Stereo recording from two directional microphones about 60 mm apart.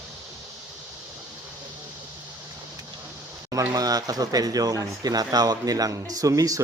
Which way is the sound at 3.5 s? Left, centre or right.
Right.